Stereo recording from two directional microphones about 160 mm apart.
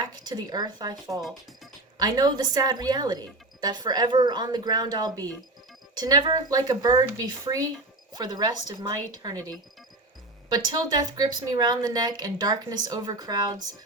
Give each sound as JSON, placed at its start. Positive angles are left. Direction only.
{"t": 0.0, "sound": "a woman's voice", "side_deg": -25}
{"t": 10.5, "sound": "a woman's voice", "side_deg": -25}